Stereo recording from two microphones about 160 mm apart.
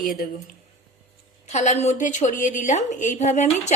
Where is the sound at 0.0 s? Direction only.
60° left (ahead or behind).